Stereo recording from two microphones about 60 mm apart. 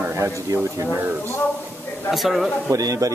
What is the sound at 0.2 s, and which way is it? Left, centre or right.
Speech, right.